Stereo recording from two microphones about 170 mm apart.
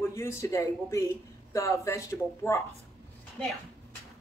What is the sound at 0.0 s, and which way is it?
A man's voice, 15° left (ahead or behind).